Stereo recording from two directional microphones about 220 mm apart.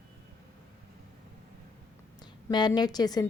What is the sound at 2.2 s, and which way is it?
A woman's voice, 20° left (ahead or behind).